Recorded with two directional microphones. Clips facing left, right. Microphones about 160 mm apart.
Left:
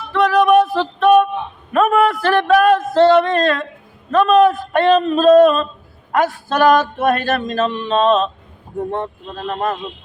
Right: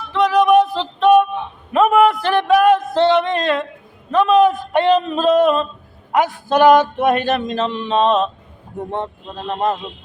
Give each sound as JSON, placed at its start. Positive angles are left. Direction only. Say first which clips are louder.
{"t": 0.1, "sound": "music", "louder": "even", "side_deg": -15}
{"t": 1.7, "sound": "a sound", "louder": "right 1 dB", "side_deg": -15}
{"t": 8.9, "sound": "speech", "louder": "left 1 dB", "side_deg": -15}